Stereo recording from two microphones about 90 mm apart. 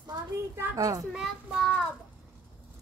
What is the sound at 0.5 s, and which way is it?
Speech, 35° right (ahead or behind).